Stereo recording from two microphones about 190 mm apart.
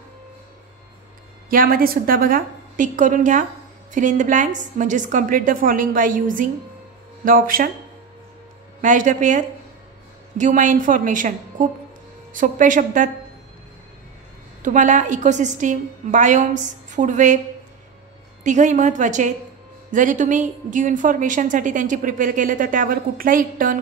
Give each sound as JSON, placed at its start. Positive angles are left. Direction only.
{"t": 1.5, "sound": "a woman's voice", "side_deg": -50}
{"t": 8.8, "sound": "a woman's voice", "side_deg": -40}
{"t": 14.6, "sound": "a woman's voice", "side_deg": -40}
{"t": 18.4, "sound": "a woman's voice", "side_deg": -40}